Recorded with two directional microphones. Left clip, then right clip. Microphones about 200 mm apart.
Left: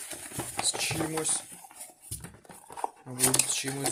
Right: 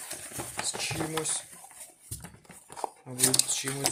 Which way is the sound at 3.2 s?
5° left (ahead or behind).